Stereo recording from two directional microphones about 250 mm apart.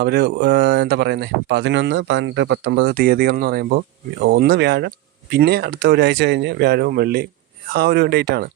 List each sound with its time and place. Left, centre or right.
0.0 s speech: right